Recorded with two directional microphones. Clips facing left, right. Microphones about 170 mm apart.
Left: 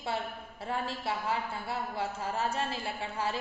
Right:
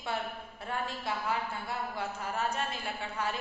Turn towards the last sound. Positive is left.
turn(degrees=30)  # may be behind; listen again after turning